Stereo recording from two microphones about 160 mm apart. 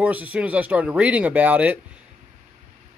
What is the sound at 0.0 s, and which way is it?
Speech, 10° right (ahead or behind).